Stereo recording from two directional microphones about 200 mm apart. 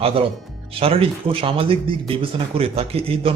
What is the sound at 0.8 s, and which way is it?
Speech, 30° right (ahead or behind).